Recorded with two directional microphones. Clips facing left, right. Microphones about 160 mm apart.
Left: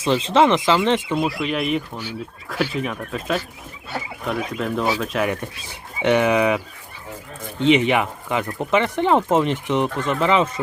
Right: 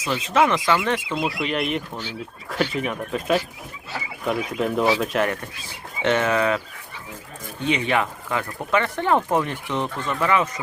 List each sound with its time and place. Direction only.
0.0 s speech: 30° left (ahead or behind)
1.2 s speech: centre (ahead or behind)
4.6 s speech: 5° right (ahead or behind)
6.0 s speech: 15° left (ahead or behind)
7.6 s speech: 20° left (ahead or behind)